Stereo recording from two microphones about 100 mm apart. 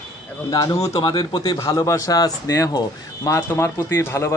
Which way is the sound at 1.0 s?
45° left (ahead or behind).